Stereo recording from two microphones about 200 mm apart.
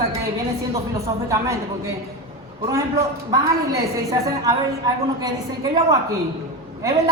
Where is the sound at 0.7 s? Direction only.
15° right (ahead or behind).